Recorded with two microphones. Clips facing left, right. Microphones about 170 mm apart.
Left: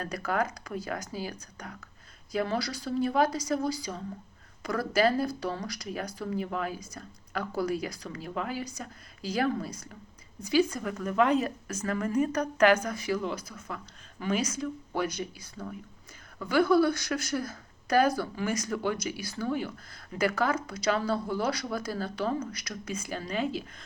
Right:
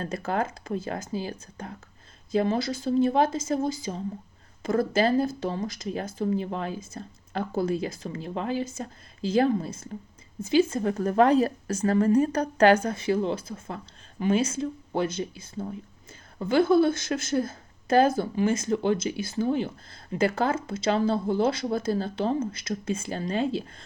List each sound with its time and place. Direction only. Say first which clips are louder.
0.0 s speech: right 2 dB; 25° right (ahead or behind)